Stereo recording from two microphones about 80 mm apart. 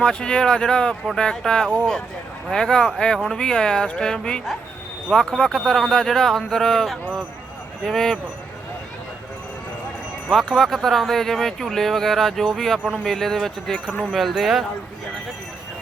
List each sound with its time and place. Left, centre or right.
0.0 s a woman's voice: centre
10.2 s speech: centre